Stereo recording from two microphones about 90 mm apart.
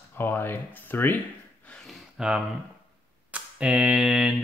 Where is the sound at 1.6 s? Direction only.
5° left (ahead or behind).